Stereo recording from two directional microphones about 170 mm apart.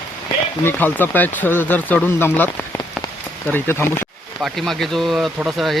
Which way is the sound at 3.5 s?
15° left (ahead or behind).